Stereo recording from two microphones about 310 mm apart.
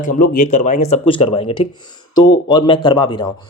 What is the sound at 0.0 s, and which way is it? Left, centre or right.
Speech, left.